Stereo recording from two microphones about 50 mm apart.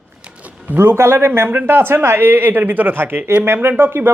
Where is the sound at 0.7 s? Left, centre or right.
Right.